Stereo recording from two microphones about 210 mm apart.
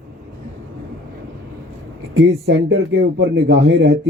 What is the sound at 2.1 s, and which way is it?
Speech, 60° right (ahead or behind).